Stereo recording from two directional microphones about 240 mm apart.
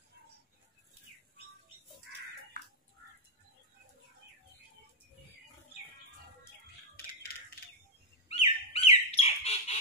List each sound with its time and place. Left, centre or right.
8.3 s bird: left